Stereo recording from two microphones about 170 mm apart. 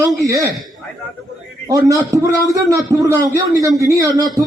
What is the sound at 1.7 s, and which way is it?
Speech, 20° right (ahead or behind).